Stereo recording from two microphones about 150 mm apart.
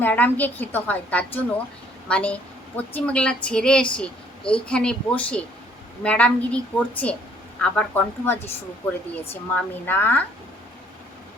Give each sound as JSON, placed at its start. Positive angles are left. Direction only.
{"t": 0.0, "sound": "a woman's voice", "side_deg": 10}